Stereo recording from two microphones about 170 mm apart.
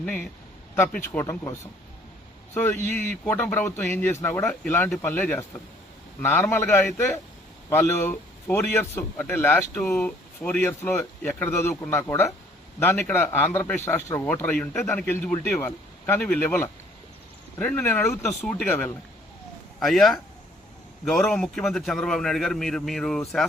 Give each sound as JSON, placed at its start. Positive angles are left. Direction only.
{"t": 0.0, "sound": "speech", "side_deg": 10}
{"t": 2.6, "sound": "speech", "side_deg": 15}
{"t": 18.1, "sound": "a man's voice", "side_deg": 0}
{"t": 18.5, "sound": "speech", "side_deg": 15}
{"t": 19.8, "sound": "a man's voice", "side_deg": 0}